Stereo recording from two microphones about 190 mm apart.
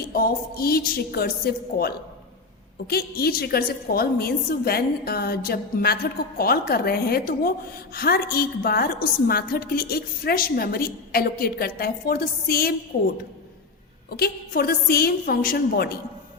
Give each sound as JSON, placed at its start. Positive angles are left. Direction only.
{"t": 0.1, "sound": "a woman's voice", "side_deg": 50}
{"t": 14.1, "sound": "a woman's voice", "side_deg": 55}